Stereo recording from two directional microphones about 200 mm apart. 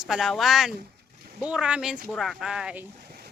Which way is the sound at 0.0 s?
Centre (ahead or behind).